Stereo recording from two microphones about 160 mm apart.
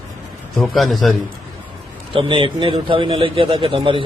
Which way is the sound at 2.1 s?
35° right (ahead or behind).